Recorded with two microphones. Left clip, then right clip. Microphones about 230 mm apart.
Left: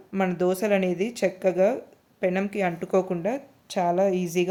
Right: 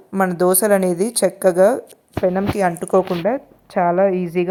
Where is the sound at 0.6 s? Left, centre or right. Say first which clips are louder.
Right 7 dB; centre.